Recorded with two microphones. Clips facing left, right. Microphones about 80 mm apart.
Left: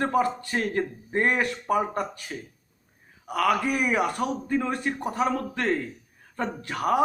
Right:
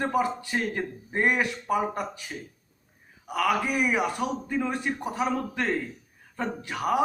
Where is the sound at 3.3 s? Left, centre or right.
Centre.